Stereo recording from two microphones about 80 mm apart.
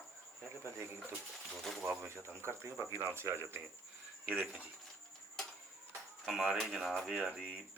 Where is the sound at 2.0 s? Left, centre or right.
Right.